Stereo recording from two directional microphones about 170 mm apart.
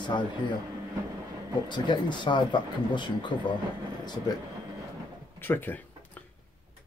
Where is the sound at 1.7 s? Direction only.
25° left (ahead or behind).